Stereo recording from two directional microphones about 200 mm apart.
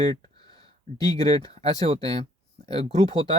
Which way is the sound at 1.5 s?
30° right (ahead or behind).